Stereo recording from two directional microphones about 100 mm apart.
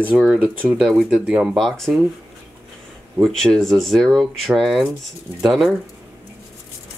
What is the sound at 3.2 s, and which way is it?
Speech, 5° left (ahead or behind).